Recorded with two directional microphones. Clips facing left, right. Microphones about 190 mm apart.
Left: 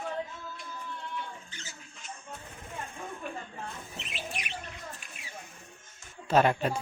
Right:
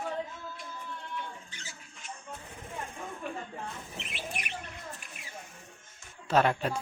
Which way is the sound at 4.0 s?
55° right (ahead or behind).